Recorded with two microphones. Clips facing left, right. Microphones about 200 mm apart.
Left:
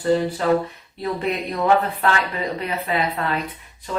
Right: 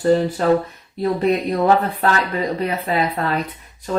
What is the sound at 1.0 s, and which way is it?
Speech, 35° right (ahead or behind).